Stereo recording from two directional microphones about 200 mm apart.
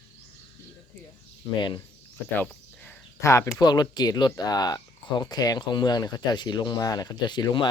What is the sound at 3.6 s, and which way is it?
Speech, 20° left (ahead or behind).